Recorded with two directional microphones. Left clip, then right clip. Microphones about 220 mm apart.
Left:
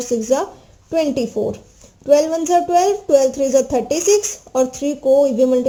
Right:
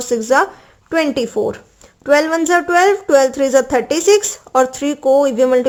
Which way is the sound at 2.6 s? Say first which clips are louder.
Right 2 dB; 25° right (ahead or behind).